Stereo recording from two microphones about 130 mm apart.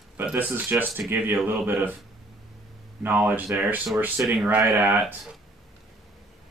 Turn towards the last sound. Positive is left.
turn(degrees=-15)  # may be behind; listen again after turning